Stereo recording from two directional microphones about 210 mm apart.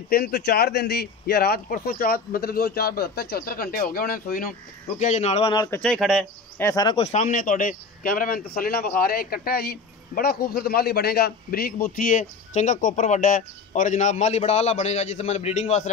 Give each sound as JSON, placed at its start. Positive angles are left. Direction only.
{"t": 0.1, "sound": "speech", "side_deg": 50}
{"t": 5.8, "sound": "speech", "side_deg": 5}
{"t": 6.6, "sound": "a man's voice", "side_deg": 15}